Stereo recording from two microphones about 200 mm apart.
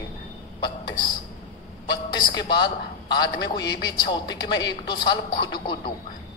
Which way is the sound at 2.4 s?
20° left (ahead or behind).